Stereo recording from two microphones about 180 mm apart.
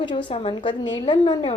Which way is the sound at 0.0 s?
25° left (ahead or behind).